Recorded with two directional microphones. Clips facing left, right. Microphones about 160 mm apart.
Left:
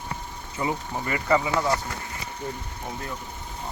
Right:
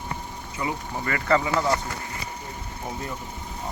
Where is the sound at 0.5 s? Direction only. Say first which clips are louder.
Left 2 dB; 25° left (ahead or behind).